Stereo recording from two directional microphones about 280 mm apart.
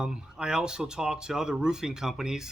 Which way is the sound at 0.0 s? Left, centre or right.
Centre.